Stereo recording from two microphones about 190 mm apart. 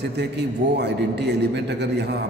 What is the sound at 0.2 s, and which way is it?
A man's voice, 60° right (ahead or behind).